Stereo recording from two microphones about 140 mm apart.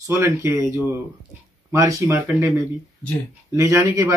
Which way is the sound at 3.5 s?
20° right (ahead or behind).